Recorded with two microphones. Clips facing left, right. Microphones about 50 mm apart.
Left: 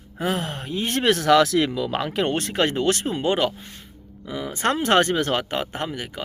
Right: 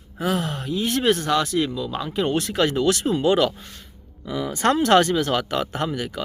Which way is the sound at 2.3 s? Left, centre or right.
Left.